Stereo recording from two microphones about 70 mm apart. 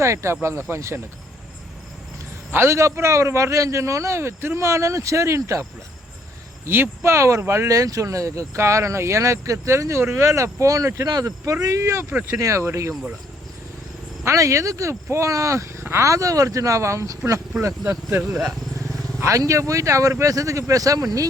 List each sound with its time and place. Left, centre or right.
0.0 s a man's voice: right
2.5 s a man's voice: right
6.7 s speech: right
7.7 s a man's voice: right
11.0 s a man's voice: right
14.3 s a man's voice: right
18.2 s speech: centre
19.5 s a man's voice: right